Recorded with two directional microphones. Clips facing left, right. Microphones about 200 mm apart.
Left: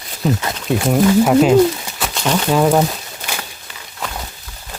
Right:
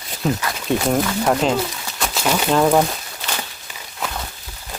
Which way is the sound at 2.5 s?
5° left (ahead or behind).